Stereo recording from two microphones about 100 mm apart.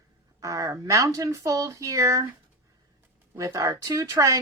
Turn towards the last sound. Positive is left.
turn(degrees=-35)  # may be behind; listen again after turning